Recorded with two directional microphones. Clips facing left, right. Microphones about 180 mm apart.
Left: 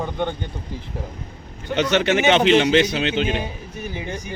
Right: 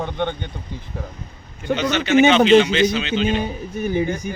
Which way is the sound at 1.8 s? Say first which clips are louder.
Right 2 dB; 65° left (ahead or behind).